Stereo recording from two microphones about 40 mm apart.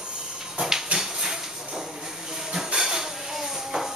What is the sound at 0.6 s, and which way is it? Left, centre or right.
Hiss, centre.